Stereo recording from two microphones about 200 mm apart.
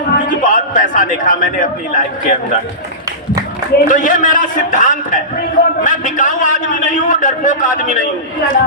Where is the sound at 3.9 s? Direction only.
40° left (ahead or behind).